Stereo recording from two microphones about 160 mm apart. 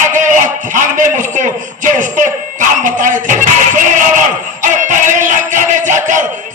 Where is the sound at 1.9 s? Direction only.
55° right (ahead or behind).